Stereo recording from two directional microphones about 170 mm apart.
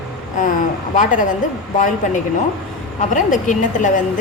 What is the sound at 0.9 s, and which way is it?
Speech, 45° left (ahead or behind).